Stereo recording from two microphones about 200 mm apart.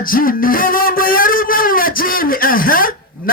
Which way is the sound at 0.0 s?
45° left (ahead or behind).